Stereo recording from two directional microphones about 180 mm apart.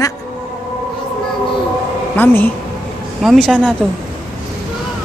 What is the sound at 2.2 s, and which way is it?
Speech, 10° left (ahead or behind).